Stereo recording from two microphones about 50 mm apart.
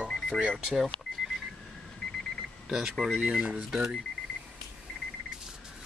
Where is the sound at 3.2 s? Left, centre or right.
Centre.